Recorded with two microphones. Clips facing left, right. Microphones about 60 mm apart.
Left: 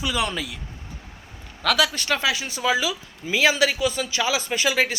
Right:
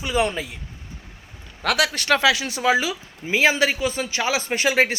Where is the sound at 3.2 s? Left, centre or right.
Right.